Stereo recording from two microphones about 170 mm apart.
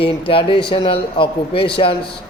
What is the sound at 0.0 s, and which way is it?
A man's voice, 30° left (ahead or behind).